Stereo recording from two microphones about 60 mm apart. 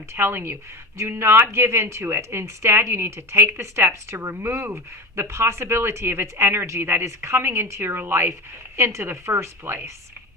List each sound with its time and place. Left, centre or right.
0.1 s a woman's voice: right
0.5 s a woman's voice: right
8.7 s a woman's voice: right